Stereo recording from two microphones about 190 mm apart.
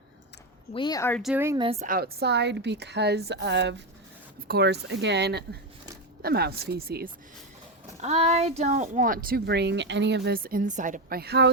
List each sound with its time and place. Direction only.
0.7 s speech: 25° left (ahead or behind)
1.1 s speech: centre (ahead or behind)
1.5 s speech: 30° right (ahead or behind)
2.0 s a woman's voice: 60° right (ahead or behind)
8.0 s speech: 35° right (ahead or behind); by 11.5 s 60° right (ahead or behind)